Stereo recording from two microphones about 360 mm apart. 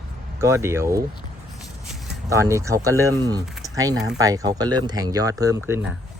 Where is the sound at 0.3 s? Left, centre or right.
Centre.